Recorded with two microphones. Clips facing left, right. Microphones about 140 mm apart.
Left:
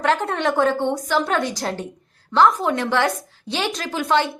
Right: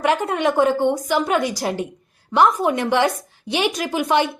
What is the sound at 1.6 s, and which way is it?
A woman's voice, 15° right (ahead or behind).